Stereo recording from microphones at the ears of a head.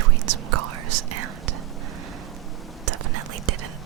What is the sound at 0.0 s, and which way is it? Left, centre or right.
Whispering, right.